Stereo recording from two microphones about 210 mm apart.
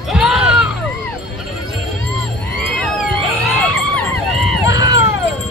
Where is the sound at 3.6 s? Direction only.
5° left (ahead or behind).